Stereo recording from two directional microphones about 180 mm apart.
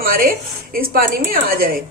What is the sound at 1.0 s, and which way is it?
Speech, 55° right (ahead or behind).